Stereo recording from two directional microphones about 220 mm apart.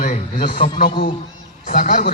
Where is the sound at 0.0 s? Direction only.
40° left (ahead or behind).